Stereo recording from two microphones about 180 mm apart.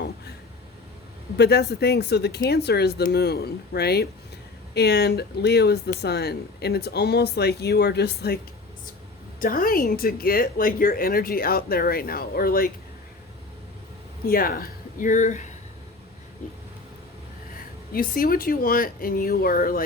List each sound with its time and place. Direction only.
1.4 s speech: 65° left (ahead or behind)
9.4 s speech: 50° left (ahead or behind)
14.3 s speech: 55° left (ahead or behind)
17.9 s speech: 55° left (ahead or behind)